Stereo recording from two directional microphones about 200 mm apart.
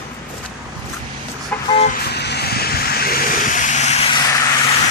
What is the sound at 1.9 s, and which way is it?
Vehicle, 55° left (ahead or behind).